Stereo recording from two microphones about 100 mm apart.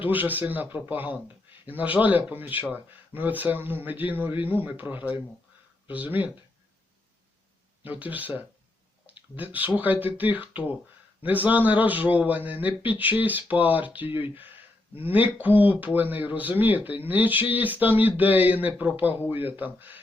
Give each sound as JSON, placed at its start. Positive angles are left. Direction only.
{"t": 0.1, "sound": "a man's voice", "side_deg": -20}
{"t": 7.9, "sound": "a man's voice", "side_deg": -15}